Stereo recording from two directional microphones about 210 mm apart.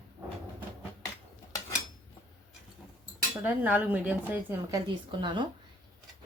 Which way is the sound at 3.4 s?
10° right (ahead or behind).